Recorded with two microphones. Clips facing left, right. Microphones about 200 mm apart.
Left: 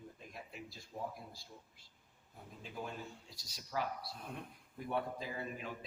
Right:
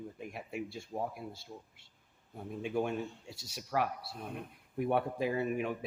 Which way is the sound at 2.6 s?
70° right (ahead or behind).